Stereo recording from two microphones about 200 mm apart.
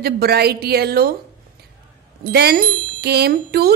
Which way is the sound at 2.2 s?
50° right (ahead or behind).